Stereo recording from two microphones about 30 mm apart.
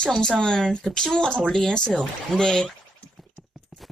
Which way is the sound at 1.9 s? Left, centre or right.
Centre.